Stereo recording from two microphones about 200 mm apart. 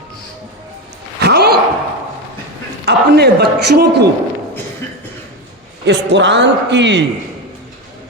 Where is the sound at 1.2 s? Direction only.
55° right (ahead or behind).